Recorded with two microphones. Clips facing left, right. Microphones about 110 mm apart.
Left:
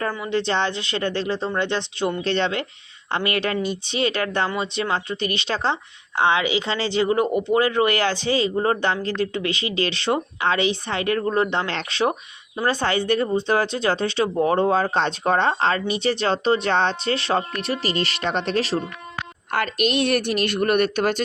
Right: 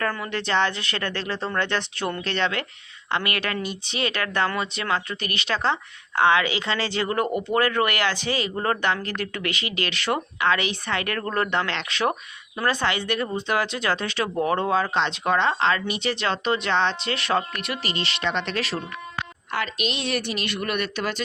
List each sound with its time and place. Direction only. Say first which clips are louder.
0.3 s speech: left 3 dB; 25° left (ahead or behind)
2.2 s speech: left 3 dB; 30° left (ahead or behind)
11.6 s speech: left 2 dB; 35° left (ahead or behind)
19.5 s a woman's voice: left 6 dB; 50° left (ahead or behind)